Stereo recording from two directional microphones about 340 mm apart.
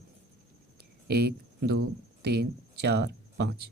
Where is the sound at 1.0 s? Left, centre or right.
Right.